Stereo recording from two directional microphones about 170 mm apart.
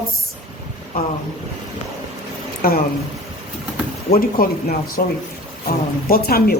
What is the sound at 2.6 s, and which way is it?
Speech, 60° left (ahead or behind).